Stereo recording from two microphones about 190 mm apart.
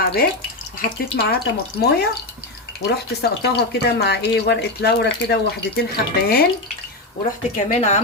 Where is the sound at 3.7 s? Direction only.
60° left (ahead or behind).